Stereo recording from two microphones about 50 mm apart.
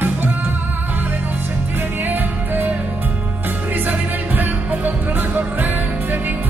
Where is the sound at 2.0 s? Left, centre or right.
Right.